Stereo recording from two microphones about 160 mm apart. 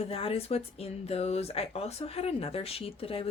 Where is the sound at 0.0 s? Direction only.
35° left (ahead or behind).